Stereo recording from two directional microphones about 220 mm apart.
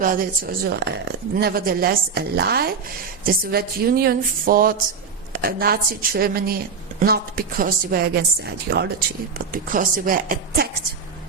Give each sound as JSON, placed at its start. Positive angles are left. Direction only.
{"t": 0.0, "sound": "speech", "side_deg": -40}
{"t": 9.5, "sound": "speech", "side_deg": -40}